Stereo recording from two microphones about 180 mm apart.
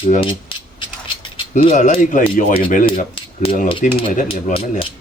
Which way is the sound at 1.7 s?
45° left (ahead or behind).